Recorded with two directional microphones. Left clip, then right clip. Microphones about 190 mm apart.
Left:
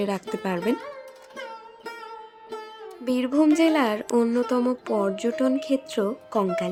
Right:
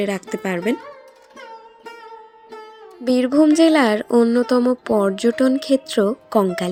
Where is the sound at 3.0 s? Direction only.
20° right (ahead or behind).